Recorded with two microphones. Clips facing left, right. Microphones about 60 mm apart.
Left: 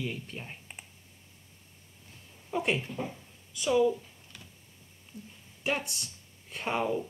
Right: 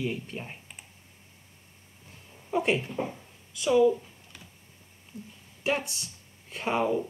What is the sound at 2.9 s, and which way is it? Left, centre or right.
Speech, centre.